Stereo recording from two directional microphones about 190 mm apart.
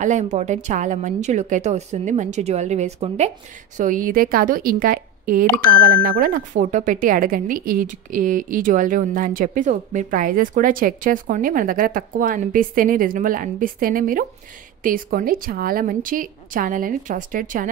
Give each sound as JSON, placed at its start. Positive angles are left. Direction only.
{"t": 0.0, "sound": "a woman's voice", "side_deg": -40}